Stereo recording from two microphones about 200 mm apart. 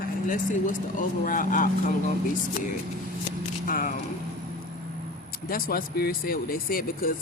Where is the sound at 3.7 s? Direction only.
45° left (ahead or behind).